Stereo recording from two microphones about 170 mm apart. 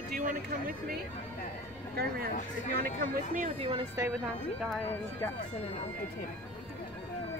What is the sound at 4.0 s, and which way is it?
Speech, 20° right (ahead or behind).